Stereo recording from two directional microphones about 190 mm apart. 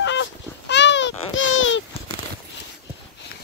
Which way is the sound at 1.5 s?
90° left.